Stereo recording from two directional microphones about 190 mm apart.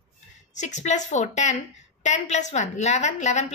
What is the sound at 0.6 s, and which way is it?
A woman's voice, 40° left (ahead or behind).